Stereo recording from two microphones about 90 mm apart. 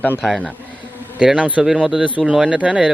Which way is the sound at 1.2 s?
15° right (ahead or behind).